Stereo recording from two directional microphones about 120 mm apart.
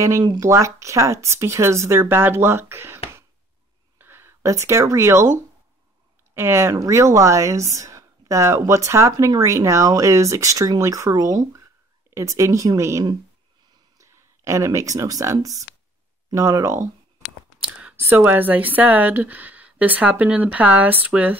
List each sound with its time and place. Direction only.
0.0 s speech: 30° right (ahead or behind)
4.0 s speech: 20° right (ahead or behind)